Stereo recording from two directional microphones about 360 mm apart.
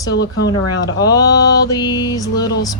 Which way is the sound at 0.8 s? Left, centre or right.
Centre.